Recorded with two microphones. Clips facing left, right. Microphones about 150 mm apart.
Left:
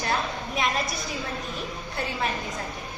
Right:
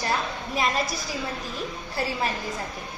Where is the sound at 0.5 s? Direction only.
Centre (ahead or behind).